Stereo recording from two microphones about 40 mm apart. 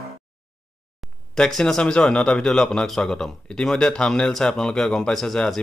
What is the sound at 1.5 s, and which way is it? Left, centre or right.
Speech, centre.